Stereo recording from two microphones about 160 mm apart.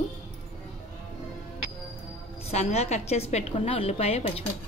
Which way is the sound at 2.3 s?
40° left (ahead or behind).